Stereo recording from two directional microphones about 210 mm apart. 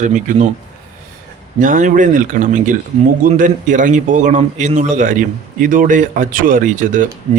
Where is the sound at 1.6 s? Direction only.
40° right (ahead or behind).